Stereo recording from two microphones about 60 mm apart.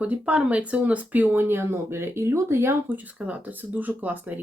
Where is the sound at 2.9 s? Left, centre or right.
Right.